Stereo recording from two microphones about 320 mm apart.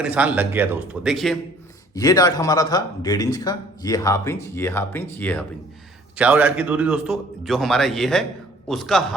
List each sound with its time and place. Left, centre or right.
0.0 s a man's voice: centre
2.0 s a man's voice: centre